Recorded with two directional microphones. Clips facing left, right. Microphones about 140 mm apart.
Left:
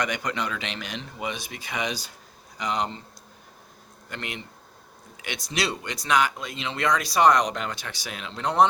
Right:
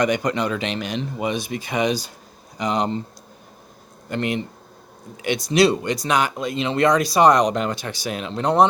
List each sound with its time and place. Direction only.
0.0 s speech: 35° right (ahead or behind)
2.6 s speech: 30° right (ahead or behind)
4.1 s speech: 40° right (ahead or behind)